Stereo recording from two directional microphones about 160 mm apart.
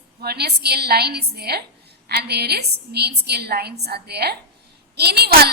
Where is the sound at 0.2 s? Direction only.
85° right.